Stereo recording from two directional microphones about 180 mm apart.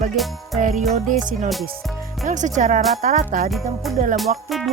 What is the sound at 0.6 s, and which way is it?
Speech, 45° right (ahead or behind).